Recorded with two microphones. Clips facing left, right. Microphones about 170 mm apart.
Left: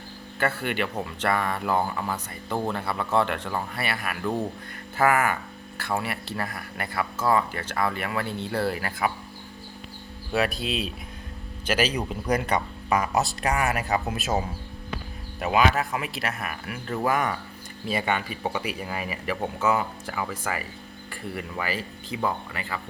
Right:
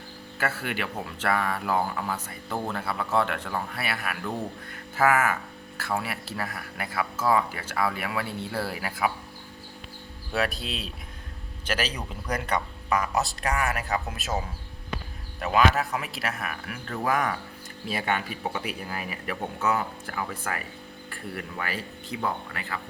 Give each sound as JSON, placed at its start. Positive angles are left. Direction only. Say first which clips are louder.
{"t": 0.3, "sound": "speech", "louder": "left 4 dB", "side_deg": -5}
{"t": 10.3, "sound": "speech", "louder": "left 3 dB", "side_deg": 0}
{"t": 15.7, "sound": "speech", "louder": "left 1 dB", "side_deg": 0}